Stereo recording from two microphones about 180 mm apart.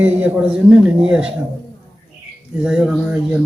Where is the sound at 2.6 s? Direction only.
5° right (ahead or behind).